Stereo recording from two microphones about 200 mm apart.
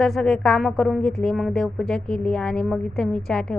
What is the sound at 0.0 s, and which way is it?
Speech, centre (ahead or behind).